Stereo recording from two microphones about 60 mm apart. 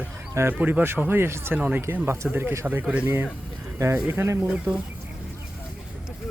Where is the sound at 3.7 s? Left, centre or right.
Right.